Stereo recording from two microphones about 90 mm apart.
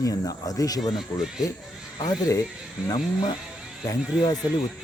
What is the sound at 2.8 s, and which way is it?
Speech, 10° right (ahead or behind).